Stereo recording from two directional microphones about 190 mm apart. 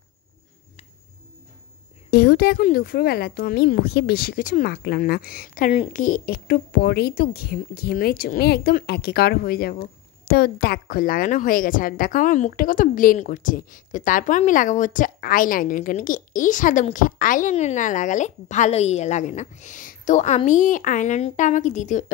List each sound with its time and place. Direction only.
2.0 s speech: 55° left (ahead or behind); by 22.0 s 40° left (ahead or behind)